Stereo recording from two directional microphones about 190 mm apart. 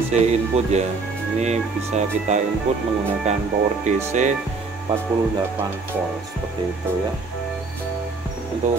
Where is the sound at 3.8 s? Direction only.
40° right (ahead or behind).